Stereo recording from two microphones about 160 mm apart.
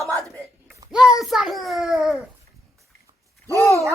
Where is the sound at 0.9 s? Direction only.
5° right (ahead or behind).